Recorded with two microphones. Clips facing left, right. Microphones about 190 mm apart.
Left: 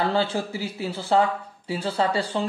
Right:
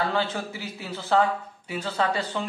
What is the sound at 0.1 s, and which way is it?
Speech, 30° left (ahead or behind).